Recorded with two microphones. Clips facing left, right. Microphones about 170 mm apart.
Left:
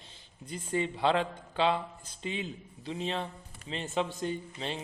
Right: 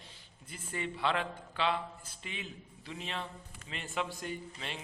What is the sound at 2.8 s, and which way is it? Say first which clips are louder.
A man's voice: left 7 dB; 30° left (ahead or behind).